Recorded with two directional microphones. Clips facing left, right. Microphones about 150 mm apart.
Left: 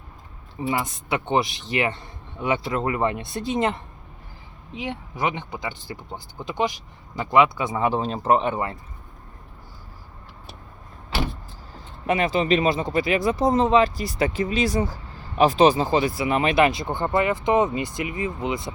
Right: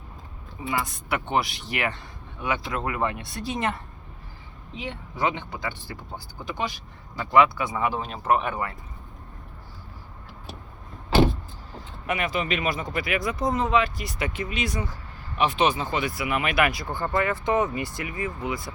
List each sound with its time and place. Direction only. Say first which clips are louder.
0.7 s speech: left 2 dB; 25° left (ahead or behind)
12.0 s speech: left 6 dB; 30° left (ahead or behind)